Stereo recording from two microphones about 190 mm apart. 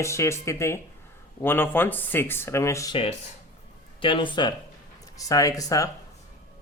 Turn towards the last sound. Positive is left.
turn(degrees=15)  # may be behind; listen again after turning